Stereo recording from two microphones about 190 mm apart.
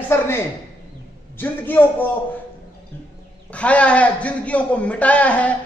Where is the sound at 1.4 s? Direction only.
10° left (ahead or behind).